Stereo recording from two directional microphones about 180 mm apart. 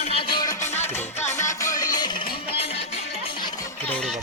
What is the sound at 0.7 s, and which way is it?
Music, 10° left (ahead or behind).